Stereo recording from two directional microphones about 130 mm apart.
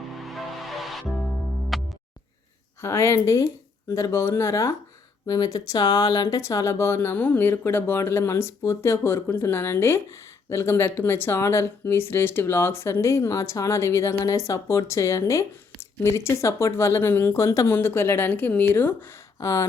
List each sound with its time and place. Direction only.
0.2 s music: centre (ahead or behind)
2.8 s speech: 20° left (ahead or behind)